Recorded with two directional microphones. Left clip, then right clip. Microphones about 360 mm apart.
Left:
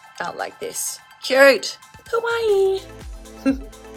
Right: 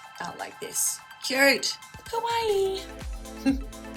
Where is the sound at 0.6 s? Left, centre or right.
Left.